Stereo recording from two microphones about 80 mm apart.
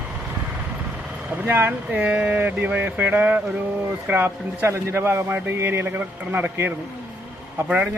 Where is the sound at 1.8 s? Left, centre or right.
Centre.